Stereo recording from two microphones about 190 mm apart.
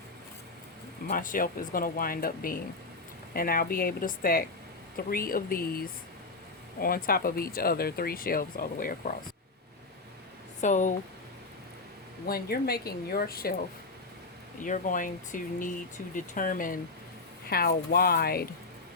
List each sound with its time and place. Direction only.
1.0 s speech: 45° left (ahead or behind)
10.6 s speech: 40° left (ahead or behind)
12.2 s speech: 55° left (ahead or behind)
14.6 s speech: 45° left (ahead or behind)